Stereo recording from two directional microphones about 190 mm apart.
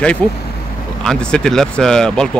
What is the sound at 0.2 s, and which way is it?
Speech, 5° left (ahead or behind).